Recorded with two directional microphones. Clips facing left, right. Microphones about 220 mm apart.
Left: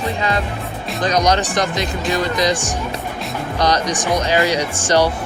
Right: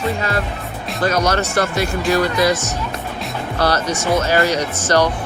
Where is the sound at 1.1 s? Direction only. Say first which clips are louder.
Left 1 dB; 15° left (ahead or behind).